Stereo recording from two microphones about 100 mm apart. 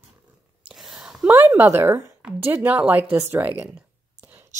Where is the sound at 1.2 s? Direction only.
20° right (ahead or behind).